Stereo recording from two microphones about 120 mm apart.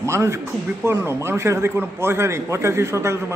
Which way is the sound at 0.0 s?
25° right (ahead or behind).